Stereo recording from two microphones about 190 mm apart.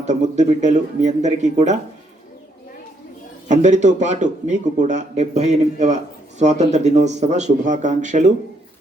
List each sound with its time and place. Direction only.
0.0 s a man's voice: 40° right (ahead or behind)
3.5 s a man's voice: 40° right (ahead or behind)